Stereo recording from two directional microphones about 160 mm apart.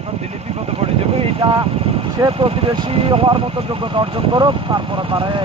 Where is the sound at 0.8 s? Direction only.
35° right (ahead or behind).